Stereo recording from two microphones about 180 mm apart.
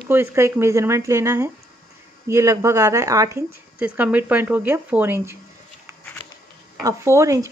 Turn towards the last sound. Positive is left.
turn(degrees=-15)  # may be behind; listen again after turning